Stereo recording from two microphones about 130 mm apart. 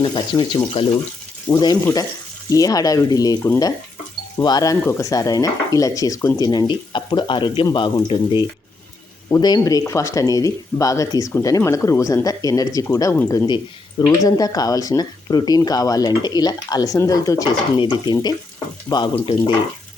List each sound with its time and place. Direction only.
0.0 s speech: 35° left (ahead or behind)